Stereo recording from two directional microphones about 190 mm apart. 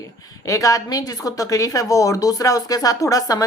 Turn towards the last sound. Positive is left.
turn(degrees=20)  # may be behind; listen again after turning